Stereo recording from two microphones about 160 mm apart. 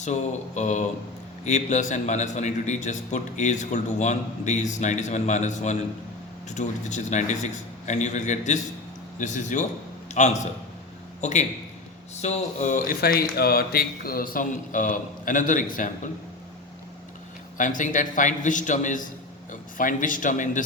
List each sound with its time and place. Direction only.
0.0 s a man's voice: 45° left (ahead or behind)
17.6 s a man's voice: 55° left (ahead or behind)